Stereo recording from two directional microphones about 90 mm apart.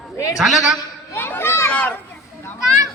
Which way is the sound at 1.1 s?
25° left (ahead or behind).